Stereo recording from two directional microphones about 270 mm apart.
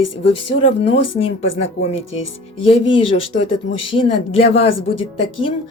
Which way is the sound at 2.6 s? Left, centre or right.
Centre.